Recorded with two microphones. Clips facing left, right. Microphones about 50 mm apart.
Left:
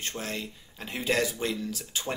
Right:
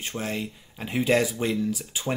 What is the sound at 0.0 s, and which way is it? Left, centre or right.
Speech, centre.